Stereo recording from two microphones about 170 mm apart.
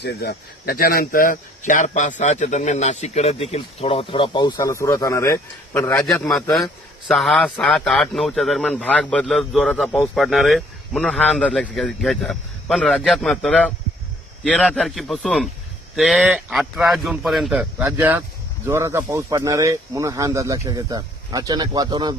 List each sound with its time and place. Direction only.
0.0 s speech: 70° left (ahead or behind); by 6.3 s 20° left (ahead or behind)
7.1 s speech: centre (ahead or behind); by 22.1 s 25° right (ahead or behind)